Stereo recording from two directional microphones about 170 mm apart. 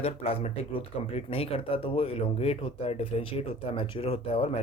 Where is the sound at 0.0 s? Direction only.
35° left (ahead or behind).